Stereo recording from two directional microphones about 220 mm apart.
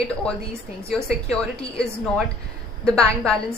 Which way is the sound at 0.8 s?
5° left (ahead or behind).